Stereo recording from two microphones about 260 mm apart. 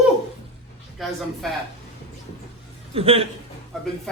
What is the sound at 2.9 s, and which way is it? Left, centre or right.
Speech, right.